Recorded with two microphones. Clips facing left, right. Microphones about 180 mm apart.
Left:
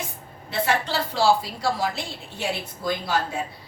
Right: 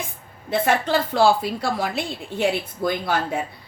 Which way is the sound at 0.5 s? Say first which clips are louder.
Right 4 dB; 50° right (ahead or behind).